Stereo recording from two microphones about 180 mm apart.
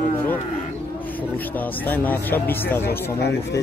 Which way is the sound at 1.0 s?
10° left (ahead or behind).